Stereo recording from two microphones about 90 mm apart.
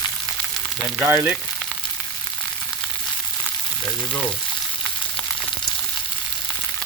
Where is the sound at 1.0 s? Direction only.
20° right (ahead or behind).